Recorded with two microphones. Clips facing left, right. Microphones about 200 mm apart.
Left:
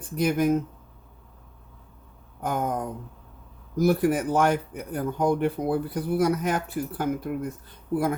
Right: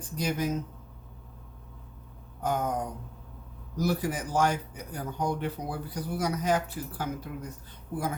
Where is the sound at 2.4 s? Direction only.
55° left (ahead or behind).